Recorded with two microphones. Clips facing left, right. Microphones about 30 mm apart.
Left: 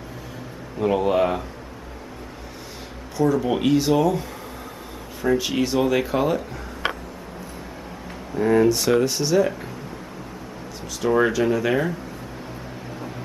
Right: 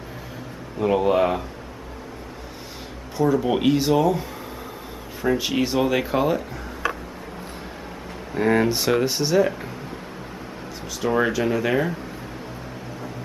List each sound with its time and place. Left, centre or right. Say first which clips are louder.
0.7 s speech: right 1 dB; centre
3.3 s speech: even; centre
8.4 s speech: left 1 dB; right
8.7 s speech: left 1 dB; centre
11.0 s speech: left 2 dB; centre